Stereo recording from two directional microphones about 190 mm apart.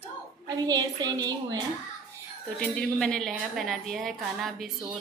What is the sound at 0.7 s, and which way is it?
Speech, 20° right (ahead or behind).